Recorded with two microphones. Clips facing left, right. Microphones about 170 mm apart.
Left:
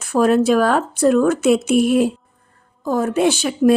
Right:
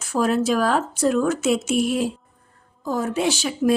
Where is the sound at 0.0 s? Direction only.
60° left (ahead or behind).